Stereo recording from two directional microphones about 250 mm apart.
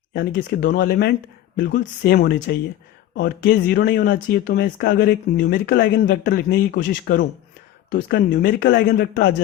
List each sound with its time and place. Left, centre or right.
0.1 s speech: left